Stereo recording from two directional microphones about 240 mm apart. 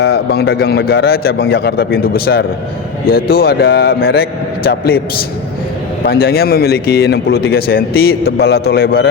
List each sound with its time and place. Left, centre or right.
0.0 s a man's voice: left
6.1 s a man's voice: left